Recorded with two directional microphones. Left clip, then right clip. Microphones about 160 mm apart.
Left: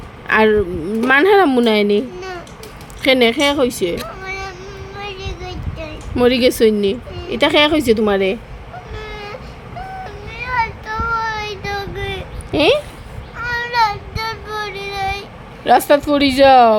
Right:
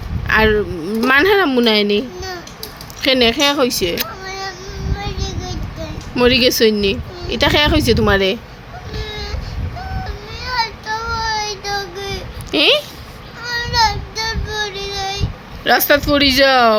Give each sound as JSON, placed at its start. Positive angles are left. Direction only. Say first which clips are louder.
{"t": 0.3, "sound": "a child's voice", "louder": "left 1 dB", "side_deg": 20}
{"t": 4.2, "sound": "a sound", "louder": "even", "side_deg": 10}
{"t": 5.8, "sound": "speech", "louder": "even", "side_deg": 15}
{"t": 10.5, "sound": "child singing", "louder": "even", "side_deg": 0}
{"t": 11.3, "sound": "child singing", "louder": "right 2 dB", "side_deg": 25}
{"t": 12.5, "sound": "speech", "louder": "right 1 dB", "side_deg": 5}
{"t": 13.4, "sound": "a sound", "louder": "left 1 dB", "side_deg": 5}
{"t": 13.7, "sound": "child singing", "louder": "right 1 dB", "side_deg": 35}
{"t": 14.4, "sound": "child singing", "louder": "right 2 dB", "side_deg": 10}
{"t": 14.9, "sound": "vehicle", "louder": "left 3 dB", "side_deg": 35}
{"t": 15.6, "sound": "speech", "louder": "left 1 dB", "side_deg": 10}